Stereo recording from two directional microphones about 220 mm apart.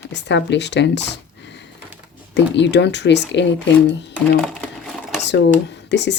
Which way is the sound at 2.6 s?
50° left (ahead or behind).